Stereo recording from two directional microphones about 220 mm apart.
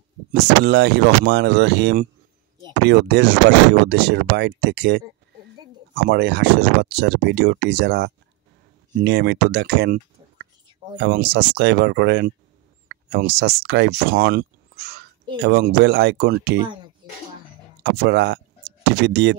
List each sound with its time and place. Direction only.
0.3 s speech: 50° right (ahead or behind)
11.0 s speech: 50° right (ahead or behind)
17.8 s speech: 50° right (ahead or behind)